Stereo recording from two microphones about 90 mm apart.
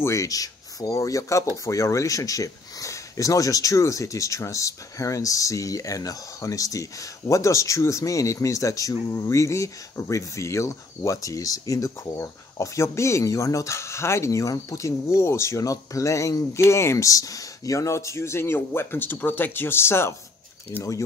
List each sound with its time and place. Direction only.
0.0 s speech: 35° left (ahead or behind)